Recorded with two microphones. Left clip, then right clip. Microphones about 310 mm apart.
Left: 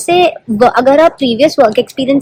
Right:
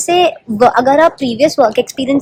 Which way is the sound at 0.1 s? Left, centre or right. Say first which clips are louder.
Left 2 dB; centre.